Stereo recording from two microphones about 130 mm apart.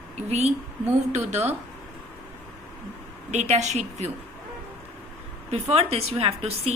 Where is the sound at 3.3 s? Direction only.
60° right (ahead or behind).